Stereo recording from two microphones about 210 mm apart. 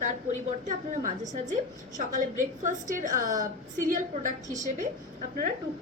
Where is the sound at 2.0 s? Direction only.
35° right (ahead or behind).